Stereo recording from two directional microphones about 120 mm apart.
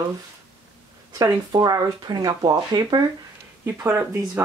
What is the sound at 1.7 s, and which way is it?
Speech, 30° right (ahead or behind).